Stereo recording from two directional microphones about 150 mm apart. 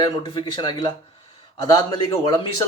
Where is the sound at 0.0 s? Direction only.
30° left (ahead or behind).